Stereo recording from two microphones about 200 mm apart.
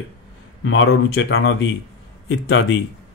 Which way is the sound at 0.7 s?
70° left (ahead or behind).